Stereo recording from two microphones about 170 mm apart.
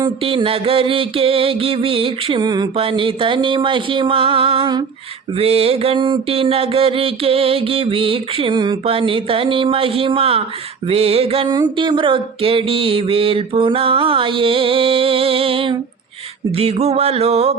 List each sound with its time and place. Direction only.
0.0 s mantra: 30° right (ahead or behind)